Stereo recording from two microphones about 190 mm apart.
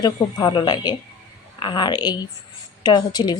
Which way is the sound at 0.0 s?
20° left (ahead or behind).